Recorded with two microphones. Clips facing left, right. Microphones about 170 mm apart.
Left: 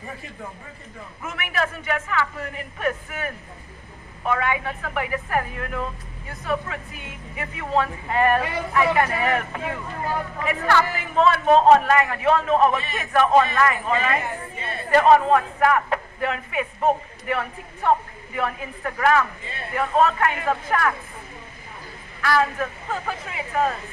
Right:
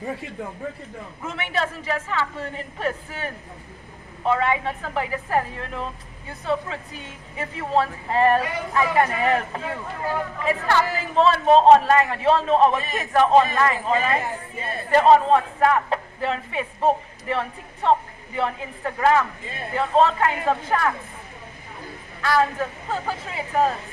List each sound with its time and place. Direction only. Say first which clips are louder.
1.2 s a man's voice: even; 30° right (ahead or behind)
4.3 s a man's voice: right 2 dB; 30° right (ahead or behind)
13.1 s speech: right 1 dB; 20° right (ahead or behind); by 14.8 s 40° right (ahead or behind)
14.9 s speech: even; 25° right (ahead or behind)
22.2 s a man's voice: right 1 dB; 25° right (ahead or behind)